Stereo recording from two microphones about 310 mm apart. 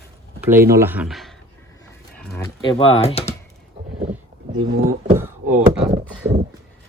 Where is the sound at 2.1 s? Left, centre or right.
Centre.